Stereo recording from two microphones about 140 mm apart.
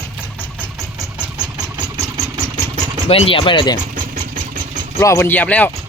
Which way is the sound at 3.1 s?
40° left (ahead or behind).